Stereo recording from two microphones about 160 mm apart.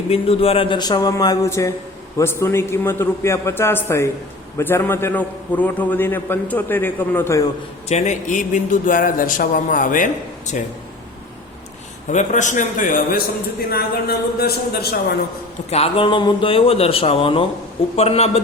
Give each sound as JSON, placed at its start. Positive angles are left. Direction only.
{"t": 0.1, "sound": "a man's voice", "side_deg": 35}
{"t": 7.9, "sound": "a man's voice", "side_deg": 45}
{"t": 12.0, "sound": "a man's voice", "side_deg": 50}
{"t": 13.7, "sound": "speech", "side_deg": 75}
{"t": 15.7, "sound": "speech", "side_deg": 35}